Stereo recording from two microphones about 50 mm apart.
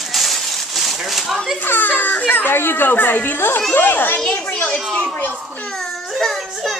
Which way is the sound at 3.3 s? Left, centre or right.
Left.